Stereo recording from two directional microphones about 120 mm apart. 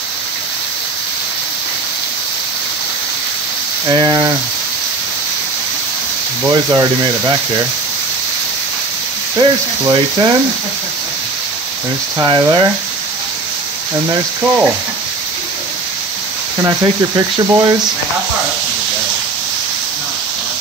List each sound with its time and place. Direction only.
3.8 s speech: 35° right (ahead or behind)
6.4 s speech: 30° right (ahead or behind)
9.4 s speech: 40° right (ahead or behind)
12.2 s speech: 40° right (ahead or behind)
14.4 s stir: 15° right (ahead or behind)
16.5 s speech: 30° right (ahead or behind)